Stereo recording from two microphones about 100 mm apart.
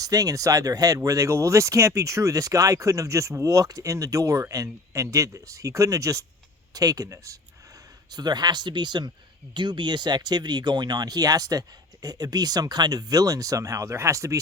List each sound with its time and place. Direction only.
0.0 s speech: 40° right (ahead or behind)